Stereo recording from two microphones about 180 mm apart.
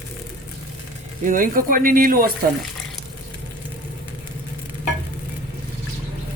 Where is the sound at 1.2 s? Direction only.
50° right (ahead or behind).